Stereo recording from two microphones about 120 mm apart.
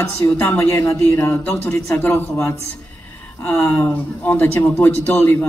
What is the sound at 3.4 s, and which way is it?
A man's voice, 15° left (ahead or behind).